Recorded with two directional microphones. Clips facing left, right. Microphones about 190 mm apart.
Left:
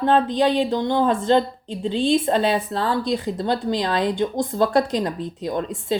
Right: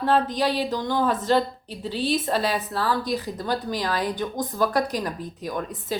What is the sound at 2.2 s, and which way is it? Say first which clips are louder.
Speech: left 5 dB; 25° left (ahead or behind).